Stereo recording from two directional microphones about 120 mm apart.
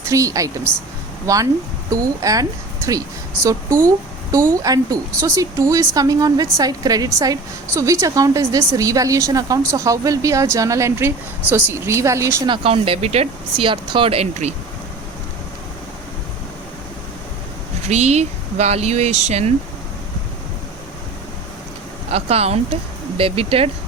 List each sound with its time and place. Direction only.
0.0 s speech: 25° right (ahead or behind)
12.5 s speech: 50° right (ahead or behind)
17.8 s speech: 65° right (ahead or behind)
22.1 s speech: 60° right (ahead or behind)